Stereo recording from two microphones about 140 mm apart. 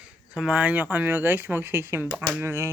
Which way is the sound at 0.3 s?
10° right (ahead or behind).